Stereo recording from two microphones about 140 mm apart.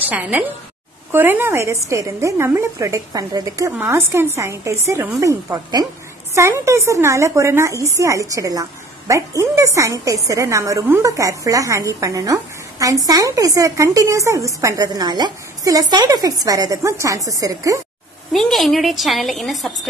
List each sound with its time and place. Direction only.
0.1 s a woman's voice: 10° right (ahead or behind)
18.3 s a woman's voice: centre (ahead or behind)